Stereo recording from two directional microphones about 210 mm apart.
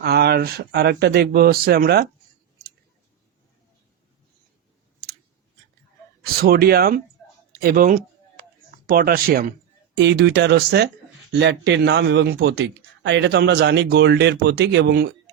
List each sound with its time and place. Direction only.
0.0 s speech: 50° right (ahead or behind)
6.4 s speech: 45° right (ahead or behind)
7.2 s a sound: centre (ahead or behind)
7.5 s a sound: 45° right (ahead or behind)
8.9 s speech: 45° right (ahead or behind)
10.0 s speech: 55° right (ahead or behind)